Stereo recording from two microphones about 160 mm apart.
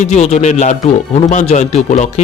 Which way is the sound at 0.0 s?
45° left (ahead or behind).